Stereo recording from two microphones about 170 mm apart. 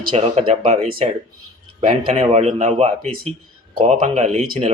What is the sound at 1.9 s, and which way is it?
Speech, 35° right (ahead or behind).